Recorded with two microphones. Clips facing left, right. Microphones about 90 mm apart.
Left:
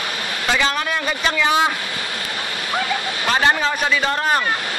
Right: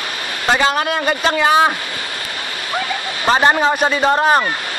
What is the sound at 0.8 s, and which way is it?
Speech, 55° right (ahead or behind).